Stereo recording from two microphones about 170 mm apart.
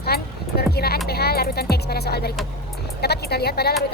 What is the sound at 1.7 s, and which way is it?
Speech, 70° left (ahead or behind).